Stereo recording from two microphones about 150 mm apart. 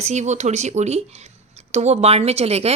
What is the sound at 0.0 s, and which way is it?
Speech, 50° right (ahead or behind).